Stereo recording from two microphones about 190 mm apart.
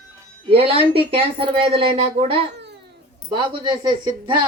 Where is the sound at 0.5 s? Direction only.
30° right (ahead or behind).